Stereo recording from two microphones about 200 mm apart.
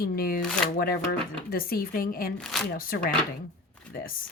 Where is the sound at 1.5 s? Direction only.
45° left (ahead or behind).